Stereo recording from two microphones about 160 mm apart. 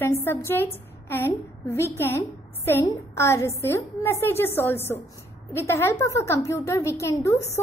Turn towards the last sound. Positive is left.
turn(degrees=20)  # may be behind; listen again after turning